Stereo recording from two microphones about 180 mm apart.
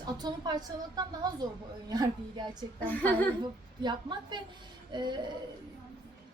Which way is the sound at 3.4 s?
25° right (ahead or behind).